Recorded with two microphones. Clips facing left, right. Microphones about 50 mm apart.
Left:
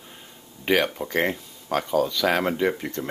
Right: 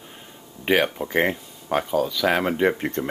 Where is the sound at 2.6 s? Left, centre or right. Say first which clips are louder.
Right 3 dB; right.